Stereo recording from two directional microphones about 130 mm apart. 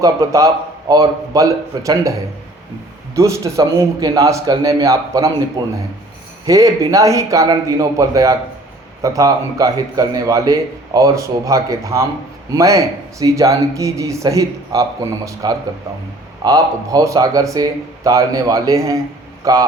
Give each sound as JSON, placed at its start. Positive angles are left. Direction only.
{"t": 0.0, "sound": "a man's voice", "side_deg": -25}